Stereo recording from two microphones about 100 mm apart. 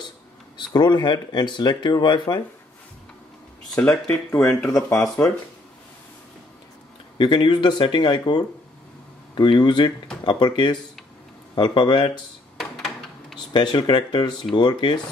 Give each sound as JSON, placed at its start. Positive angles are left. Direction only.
{"t": 0.6, "sound": "speech", "side_deg": 45}
{"t": 3.7, "sound": "speech", "side_deg": 10}
{"t": 4.6, "sound": "speech", "side_deg": 35}
{"t": 5.2, "sound": "speech", "side_deg": 20}
{"t": 7.2, "sound": "speech", "side_deg": 55}
{"t": 12.5, "sound": "a sound", "side_deg": 0}
{"t": 13.5, "sound": "speech", "side_deg": 50}